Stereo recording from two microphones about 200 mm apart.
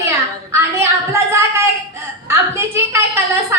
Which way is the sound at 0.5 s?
15° right (ahead or behind).